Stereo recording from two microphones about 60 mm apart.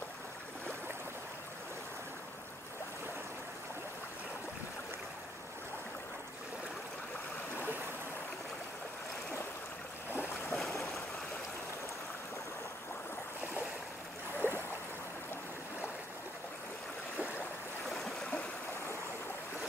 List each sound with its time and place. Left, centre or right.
10.1 s boat: left
10.5 s stream: centre
14.4 s a sound: right
17.8 s stream: centre